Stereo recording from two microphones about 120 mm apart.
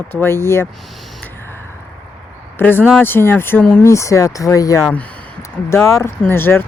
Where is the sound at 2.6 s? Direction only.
15° left (ahead or behind).